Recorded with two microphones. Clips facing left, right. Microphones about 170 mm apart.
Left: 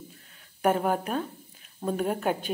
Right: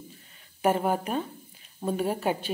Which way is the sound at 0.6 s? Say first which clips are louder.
Even; 5° right (ahead or behind).